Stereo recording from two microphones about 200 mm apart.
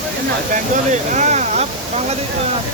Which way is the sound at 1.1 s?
35° right (ahead or behind).